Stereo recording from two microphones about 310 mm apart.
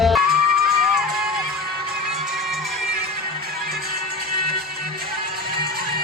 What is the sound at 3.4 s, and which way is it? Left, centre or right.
Music, right.